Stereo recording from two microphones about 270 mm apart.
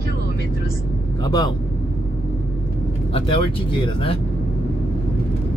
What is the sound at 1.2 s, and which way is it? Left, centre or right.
Speech, centre.